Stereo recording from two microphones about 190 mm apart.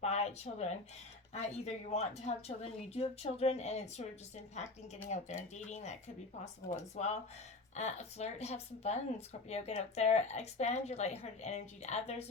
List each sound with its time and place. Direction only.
0.0 s speech: 35° left (ahead or behind)
5.0 s speech: 35° left (ahead or behind)